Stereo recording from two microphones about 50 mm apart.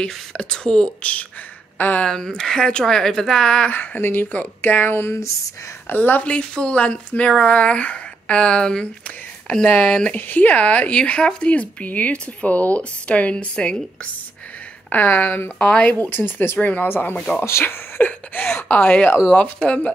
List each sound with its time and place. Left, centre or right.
0.0 s speech: centre
1.8 s speech: left
2.0 s speech: centre
3.7 s speech: left
4.0 s speech: left
6.5 s speech: left
10.1 s speech: left
11.0 s speech: centre
14.9 s speech: left
17.4 s speech: left
18.0 s speech: left
18.7 s speech: left